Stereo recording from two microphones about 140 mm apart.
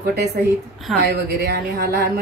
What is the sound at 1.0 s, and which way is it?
Speech, 90° right.